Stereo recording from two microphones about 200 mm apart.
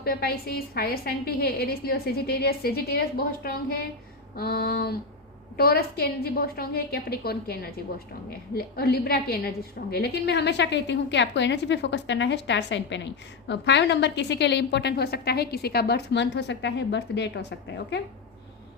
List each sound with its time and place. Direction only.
0.0 s a woman's voice: 50° left (ahead or behind)